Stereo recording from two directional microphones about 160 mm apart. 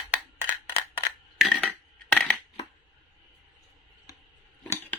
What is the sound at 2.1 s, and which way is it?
Coin, 5° left (ahead or behind).